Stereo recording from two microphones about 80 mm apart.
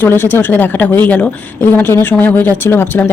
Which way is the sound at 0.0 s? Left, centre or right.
Left.